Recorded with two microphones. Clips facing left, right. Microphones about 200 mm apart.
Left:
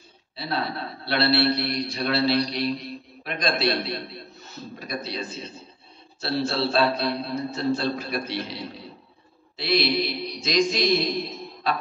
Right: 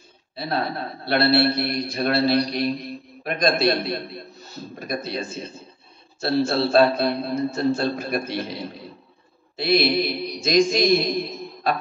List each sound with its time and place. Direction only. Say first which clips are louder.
0.4 s a man's voice: right 3 dB; 50° right (ahead or behind)